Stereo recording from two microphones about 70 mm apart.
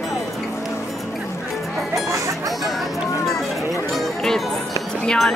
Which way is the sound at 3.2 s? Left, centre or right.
Centre.